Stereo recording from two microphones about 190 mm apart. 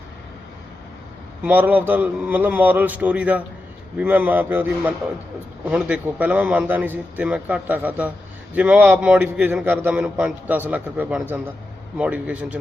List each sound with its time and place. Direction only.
1.5 s a man's voice: 10° right (ahead or behind)